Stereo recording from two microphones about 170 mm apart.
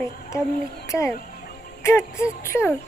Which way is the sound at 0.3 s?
15° left (ahead or behind).